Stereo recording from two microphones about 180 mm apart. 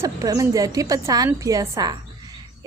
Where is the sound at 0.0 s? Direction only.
20° right (ahead or behind).